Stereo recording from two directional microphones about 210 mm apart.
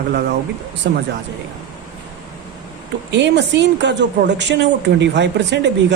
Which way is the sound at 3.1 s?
55° right (ahead or behind).